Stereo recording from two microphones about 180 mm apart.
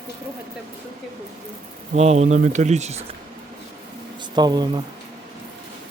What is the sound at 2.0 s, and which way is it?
Speech, 40° right (ahead or behind).